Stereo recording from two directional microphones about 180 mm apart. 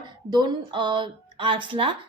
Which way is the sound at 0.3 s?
25° right (ahead or behind).